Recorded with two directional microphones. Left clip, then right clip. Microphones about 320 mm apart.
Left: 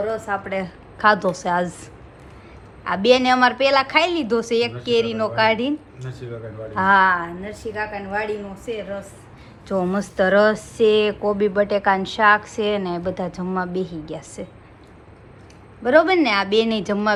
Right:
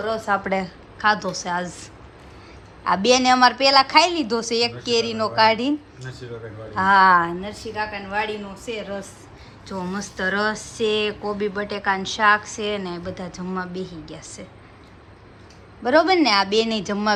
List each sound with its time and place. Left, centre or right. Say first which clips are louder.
0.3 s a woman's voice: right 3 dB; right
0.9 s a woman's voice: left 3 dB; centre
6.7 s a woman's voice: even; centre
7.1 s a woman's voice: right 5 dB; right
9.6 s a woman's voice: left 7 dB; centre
15.8 s a woman's voice: left 1 dB; centre